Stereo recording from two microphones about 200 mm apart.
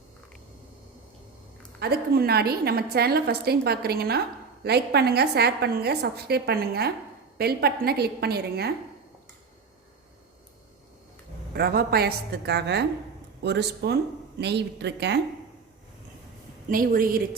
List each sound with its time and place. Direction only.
1.8 s a woman's voice: 50° right (ahead or behind)
11.5 s a woman's voice: 50° right (ahead or behind)
16.6 s a woman's voice: 45° right (ahead or behind)